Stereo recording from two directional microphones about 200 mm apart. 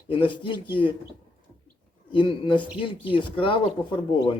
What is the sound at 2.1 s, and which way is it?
A man's voice, 25° left (ahead or behind).